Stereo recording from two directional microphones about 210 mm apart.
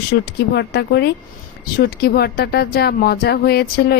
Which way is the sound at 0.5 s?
55° left (ahead or behind).